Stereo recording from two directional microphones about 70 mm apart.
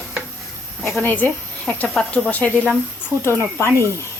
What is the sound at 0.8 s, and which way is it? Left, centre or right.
Speech, left.